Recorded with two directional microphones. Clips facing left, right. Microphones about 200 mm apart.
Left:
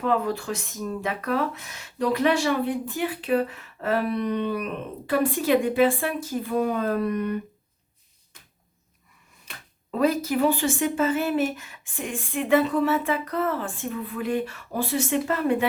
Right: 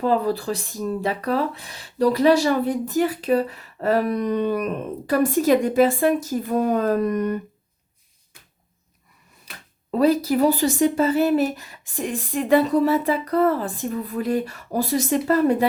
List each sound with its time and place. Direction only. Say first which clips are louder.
0.0 s speech: right 4 dB; 35° right (ahead or behind)
9.9 s speech: right 4 dB; 35° right (ahead or behind)